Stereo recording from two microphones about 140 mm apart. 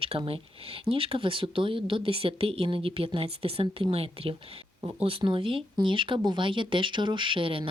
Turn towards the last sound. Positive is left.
turn(degrees=-40)  # may be behind; listen again after turning